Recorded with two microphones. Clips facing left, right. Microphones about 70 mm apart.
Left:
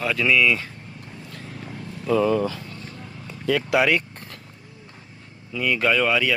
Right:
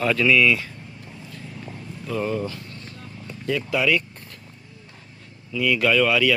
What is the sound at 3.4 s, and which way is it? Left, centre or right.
Speech, left.